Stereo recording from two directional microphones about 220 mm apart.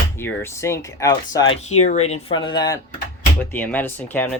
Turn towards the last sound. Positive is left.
turn(degrees=10)  # may be behind; listen again after turning